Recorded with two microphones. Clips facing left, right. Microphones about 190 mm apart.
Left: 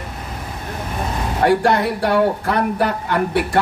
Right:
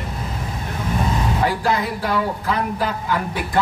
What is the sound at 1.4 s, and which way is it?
A man's voice, 65° left (ahead or behind).